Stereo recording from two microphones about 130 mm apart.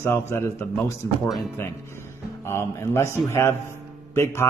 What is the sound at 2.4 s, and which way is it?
A man's voice, 20° left (ahead or behind).